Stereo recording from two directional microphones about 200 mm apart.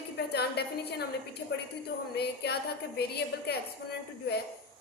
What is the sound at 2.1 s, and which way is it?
Music, 55° left (ahead or behind).